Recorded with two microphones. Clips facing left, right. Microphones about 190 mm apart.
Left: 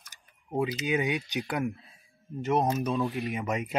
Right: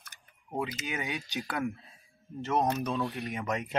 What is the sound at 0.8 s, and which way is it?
Speech, 15° left (ahead or behind).